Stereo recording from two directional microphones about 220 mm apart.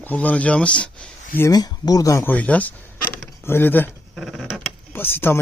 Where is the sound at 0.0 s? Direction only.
5° left (ahead or behind).